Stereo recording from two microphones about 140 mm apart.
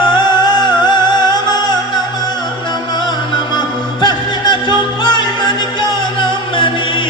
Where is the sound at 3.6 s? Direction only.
30° left (ahead or behind).